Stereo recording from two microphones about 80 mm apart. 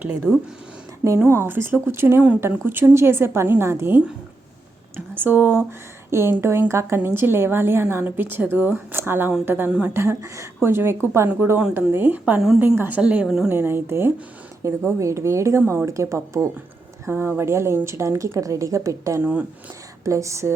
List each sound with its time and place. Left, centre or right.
0.3 s speech: centre
1.2 s a woman's voice: right
6.1 s a woman's voice: right
13.0 s a woman's voice: centre
13.5 s a woman's voice: right
19.2 s a woman's voice: centre
20.1 s a woman's voice: right